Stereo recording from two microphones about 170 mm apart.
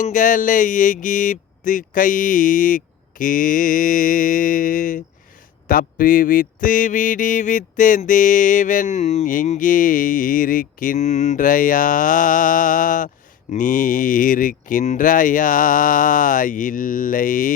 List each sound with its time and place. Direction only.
0.0 s mantra: 50° left (ahead or behind)